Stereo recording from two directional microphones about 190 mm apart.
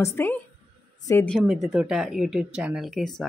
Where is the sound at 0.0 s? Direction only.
15° left (ahead or behind).